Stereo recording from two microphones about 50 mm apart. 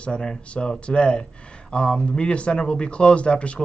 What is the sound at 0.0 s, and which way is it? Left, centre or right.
Speech, centre.